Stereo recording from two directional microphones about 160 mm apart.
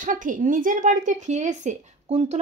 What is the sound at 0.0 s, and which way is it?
Speech, 55° right (ahead or behind).